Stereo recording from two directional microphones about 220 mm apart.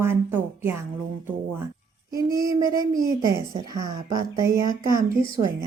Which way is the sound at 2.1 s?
15° right (ahead or behind).